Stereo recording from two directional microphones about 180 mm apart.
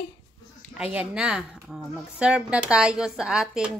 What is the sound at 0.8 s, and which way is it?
A woman's voice, 5° right (ahead or behind).